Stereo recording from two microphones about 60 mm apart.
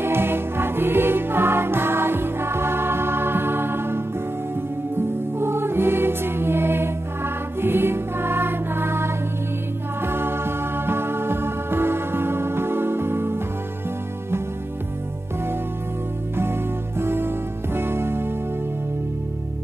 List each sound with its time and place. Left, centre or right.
0.0 s music: right
16.3 s music: right